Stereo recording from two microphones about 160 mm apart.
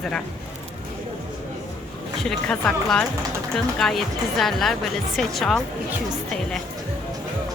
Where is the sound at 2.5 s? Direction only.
5° left (ahead or behind).